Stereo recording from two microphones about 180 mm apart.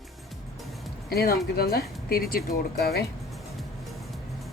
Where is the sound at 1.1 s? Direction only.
60° left (ahead or behind).